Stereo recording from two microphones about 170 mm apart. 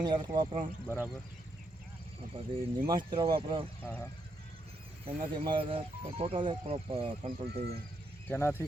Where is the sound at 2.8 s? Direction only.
25° right (ahead or behind).